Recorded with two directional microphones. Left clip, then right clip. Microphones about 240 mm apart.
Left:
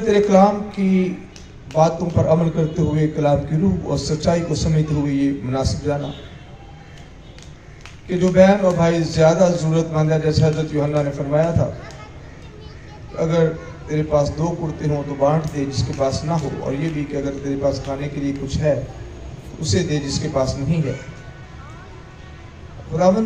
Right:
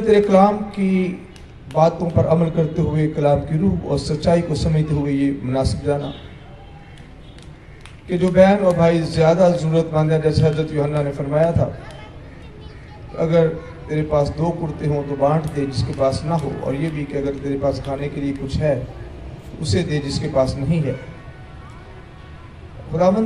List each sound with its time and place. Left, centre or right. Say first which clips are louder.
0.0 s a man's voice: right 1 dB; right
8.1 s a man's voice: even; right
13.2 s a man's voice: right 2 dB; right
22.9 s a man's voice: even; right